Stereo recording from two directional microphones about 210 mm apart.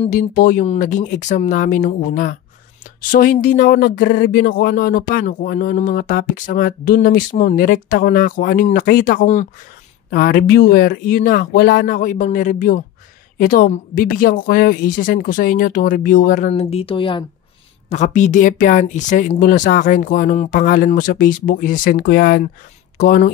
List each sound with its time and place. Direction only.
0.0 s speech: 35° left (ahead or behind)